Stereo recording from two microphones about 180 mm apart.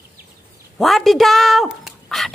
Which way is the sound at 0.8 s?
Centre (ahead or behind).